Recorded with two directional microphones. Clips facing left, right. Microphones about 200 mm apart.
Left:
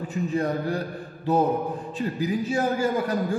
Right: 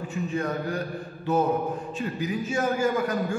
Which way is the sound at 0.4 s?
35° left (ahead or behind).